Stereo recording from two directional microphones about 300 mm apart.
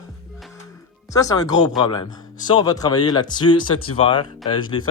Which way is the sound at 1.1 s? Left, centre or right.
Centre.